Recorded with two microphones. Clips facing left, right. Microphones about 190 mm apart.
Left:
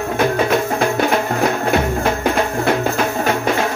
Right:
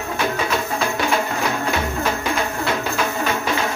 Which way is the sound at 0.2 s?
50° left (ahead or behind).